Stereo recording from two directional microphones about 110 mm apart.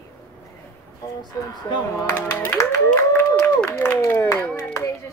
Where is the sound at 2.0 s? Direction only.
20° left (ahead or behind).